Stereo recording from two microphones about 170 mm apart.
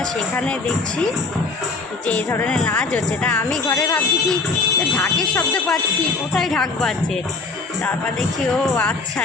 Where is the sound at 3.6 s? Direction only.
20° left (ahead or behind).